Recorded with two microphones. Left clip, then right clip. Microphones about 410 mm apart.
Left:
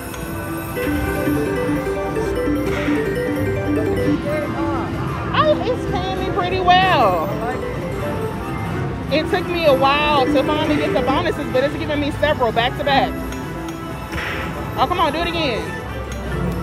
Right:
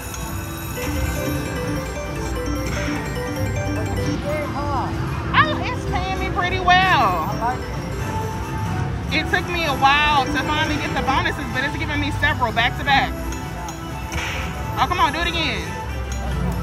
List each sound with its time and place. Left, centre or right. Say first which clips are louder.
5.3 s music: left 2 dB; centre
9.1 s speech: left 2 dB; centre
14.8 s speech: left 1 dB; centre